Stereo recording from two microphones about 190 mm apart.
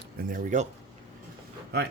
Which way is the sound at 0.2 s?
45° right (ahead or behind).